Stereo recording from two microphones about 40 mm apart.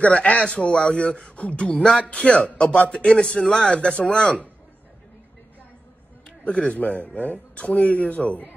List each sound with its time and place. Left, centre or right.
0.0 s speech: left
1.6 s speech: left
3.7 s speech: left
6.4 s speech: left